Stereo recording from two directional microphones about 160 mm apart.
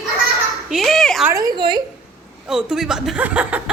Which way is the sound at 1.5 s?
25° right (ahead or behind).